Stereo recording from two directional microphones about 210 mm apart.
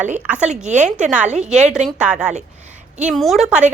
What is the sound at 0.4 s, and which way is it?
Speech, 35° right (ahead or behind).